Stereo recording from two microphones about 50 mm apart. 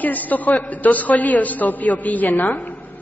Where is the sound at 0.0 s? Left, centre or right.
Left.